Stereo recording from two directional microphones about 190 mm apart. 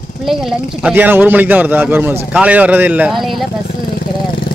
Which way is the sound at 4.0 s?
55° left (ahead or behind).